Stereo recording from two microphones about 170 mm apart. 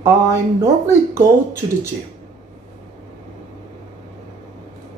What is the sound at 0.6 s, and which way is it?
Speech, 15° right (ahead or behind).